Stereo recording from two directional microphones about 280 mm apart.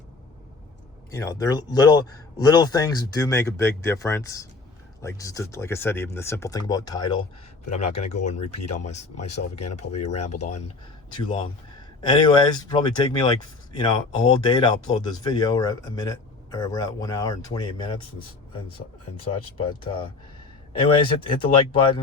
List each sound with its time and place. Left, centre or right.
1.1 s speech: centre
7.7 s speech: left
9.6 s speech: left
10.2 s speech: left
19.2 s speech: centre